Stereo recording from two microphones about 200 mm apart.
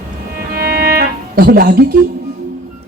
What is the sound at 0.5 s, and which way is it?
Music, 50° right (ahead or behind).